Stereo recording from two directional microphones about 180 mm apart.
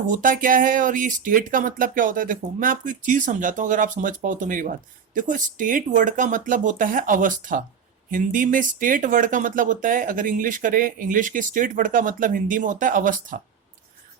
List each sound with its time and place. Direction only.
0.1 s speech: 50° right (ahead or behind)